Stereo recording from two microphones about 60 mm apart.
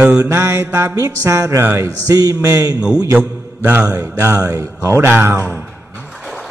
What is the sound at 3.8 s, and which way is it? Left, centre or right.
Music, right.